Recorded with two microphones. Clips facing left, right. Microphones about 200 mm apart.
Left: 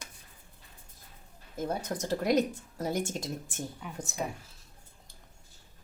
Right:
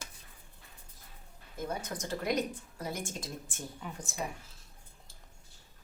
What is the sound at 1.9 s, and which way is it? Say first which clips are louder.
Speech: left 7 dB; 40° left (ahead or behind).